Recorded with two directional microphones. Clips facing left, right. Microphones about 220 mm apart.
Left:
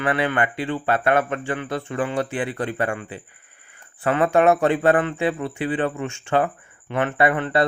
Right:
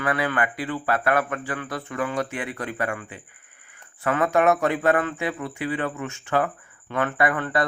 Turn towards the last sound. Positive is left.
turn(degrees=25)  # may be behind; listen again after turning